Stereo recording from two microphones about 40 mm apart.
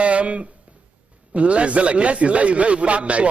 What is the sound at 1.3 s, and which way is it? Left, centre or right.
A man's voice, right.